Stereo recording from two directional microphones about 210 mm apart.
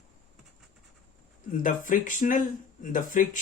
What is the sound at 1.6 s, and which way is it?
Speech, 40° left (ahead or behind).